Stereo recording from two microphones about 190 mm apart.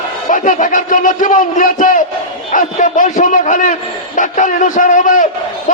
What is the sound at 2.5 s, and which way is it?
A man's voice, 45° left (ahead or behind).